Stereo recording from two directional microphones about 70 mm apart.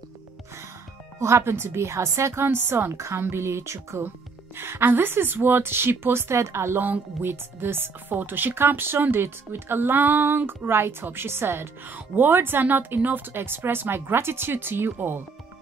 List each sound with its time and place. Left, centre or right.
1.2 s a woman's voice: right